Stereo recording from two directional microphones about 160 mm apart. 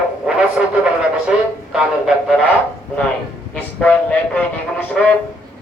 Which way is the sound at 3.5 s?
10° left (ahead or behind).